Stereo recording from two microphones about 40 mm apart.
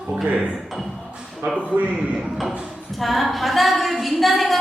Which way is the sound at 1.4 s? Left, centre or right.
Right.